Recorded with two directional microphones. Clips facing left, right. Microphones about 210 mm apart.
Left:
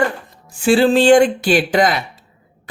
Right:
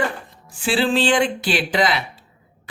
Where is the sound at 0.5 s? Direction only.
45° left (ahead or behind).